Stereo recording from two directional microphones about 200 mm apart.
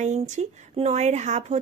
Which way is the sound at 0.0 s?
35° right (ahead or behind).